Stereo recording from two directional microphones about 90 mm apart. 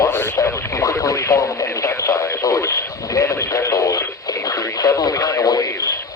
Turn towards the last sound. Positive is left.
turn(degrees=40)  # may be behind; listen again after turning